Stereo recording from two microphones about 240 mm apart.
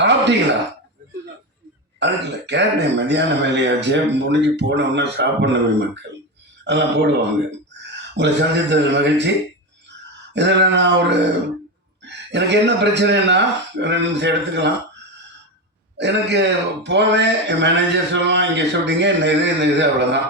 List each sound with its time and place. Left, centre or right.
0.0 s a sound: right
2.0 s a man's voice: right
10.3 s a man's voice: right
12.0 s a man's voice: right
16.0 s a man's voice: right